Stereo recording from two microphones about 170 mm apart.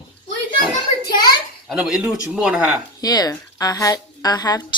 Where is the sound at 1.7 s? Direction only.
5° right (ahead or behind).